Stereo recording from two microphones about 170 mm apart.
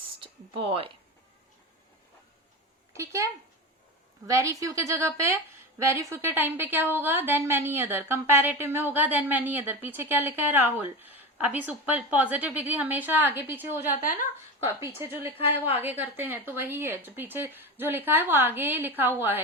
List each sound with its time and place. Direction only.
0.2 s speech: 30° right (ahead or behind)
2.9 s speech: 15° right (ahead or behind)
4.3 s a woman's voice: 20° right (ahead or behind)